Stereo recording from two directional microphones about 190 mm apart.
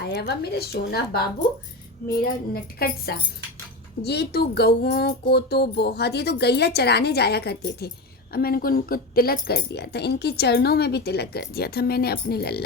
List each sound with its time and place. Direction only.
0.0 s speech: 60° left (ahead or behind)
2.2 s a woman's voice: 55° left (ahead or behind)